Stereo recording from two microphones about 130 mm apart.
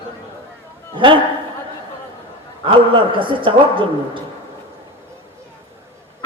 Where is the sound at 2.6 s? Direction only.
40° right (ahead or behind).